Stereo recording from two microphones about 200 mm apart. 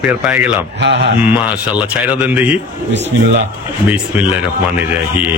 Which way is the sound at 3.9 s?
5° right (ahead or behind).